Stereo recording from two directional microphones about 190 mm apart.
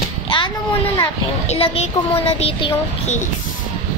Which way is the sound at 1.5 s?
30° left (ahead or behind).